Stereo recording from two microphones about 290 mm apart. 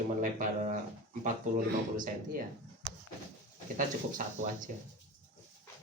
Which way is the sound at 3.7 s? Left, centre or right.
Right.